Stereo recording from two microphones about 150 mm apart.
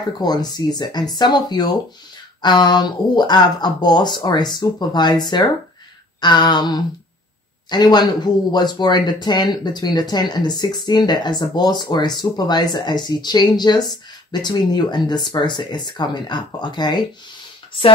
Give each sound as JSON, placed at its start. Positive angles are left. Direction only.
{"t": 0.2, "sound": "speech", "side_deg": 25}